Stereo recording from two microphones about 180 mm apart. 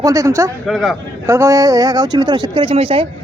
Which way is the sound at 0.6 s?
Centre (ahead or behind).